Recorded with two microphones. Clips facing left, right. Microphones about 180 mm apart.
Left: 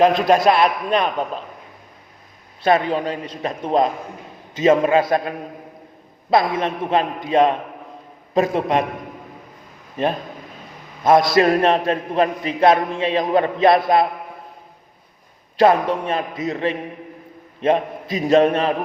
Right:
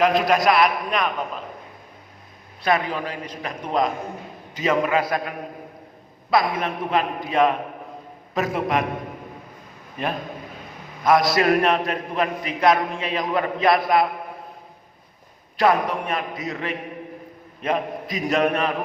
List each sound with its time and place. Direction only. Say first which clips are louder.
0.0 s a man's voice: left 4 dB; 25° left (ahead or behind)
2.6 s a man's voice: left 5 dB; 25° left (ahead or behind)
6.3 s a man's voice: left 3 dB; 25° left (ahead or behind)
11.0 s a man's voice: left 4 dB; 25° left (ahead or behind)
15.5 s a man's voice: left 4 dB; 25° left (ahead or behind)